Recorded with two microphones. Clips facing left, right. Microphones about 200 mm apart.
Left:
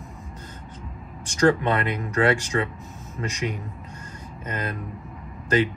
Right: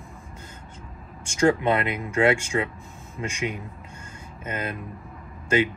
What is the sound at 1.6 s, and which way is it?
Speech, 10° right (ahead or behind).